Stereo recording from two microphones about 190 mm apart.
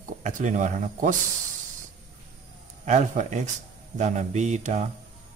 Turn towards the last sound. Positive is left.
turn(degrees=-40)  # may be behind; listen again after turning